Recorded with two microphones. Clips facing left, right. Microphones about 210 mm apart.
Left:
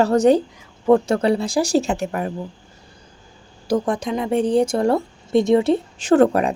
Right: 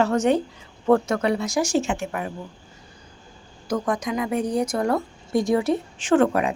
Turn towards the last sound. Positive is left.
turn(degrees=40)  # may be behind; listen again after turning